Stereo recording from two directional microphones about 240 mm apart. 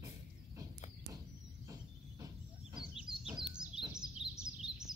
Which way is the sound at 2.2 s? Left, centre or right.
Centre.